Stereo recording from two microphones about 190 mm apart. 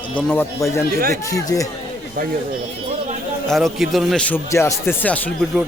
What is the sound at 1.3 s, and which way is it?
Speech, 20° left (ahead or behind).